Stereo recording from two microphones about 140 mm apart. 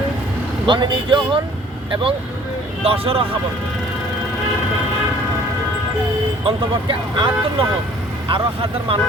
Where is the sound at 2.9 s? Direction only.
45° right (ahead or behind).